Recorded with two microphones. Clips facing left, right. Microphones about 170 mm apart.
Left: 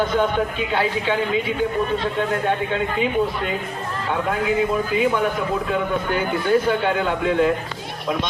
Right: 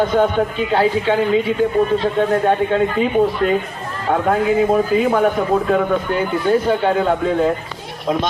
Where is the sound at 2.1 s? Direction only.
40° right (ahead or behind).